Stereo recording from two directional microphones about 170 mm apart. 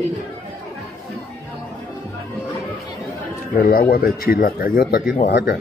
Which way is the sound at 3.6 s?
60° left (ahead or behind).